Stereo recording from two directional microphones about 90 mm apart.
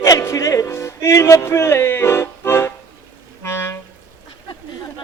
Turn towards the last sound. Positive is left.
turn(degrees=25)  # may be behind; listen again after turning